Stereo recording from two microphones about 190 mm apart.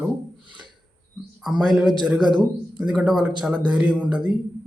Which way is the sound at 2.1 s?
25° right (ahead or behind).